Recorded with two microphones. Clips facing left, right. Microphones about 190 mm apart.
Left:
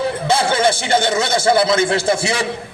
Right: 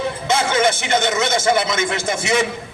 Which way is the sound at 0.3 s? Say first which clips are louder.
Left 1 dB; 35° left (ahead or behind).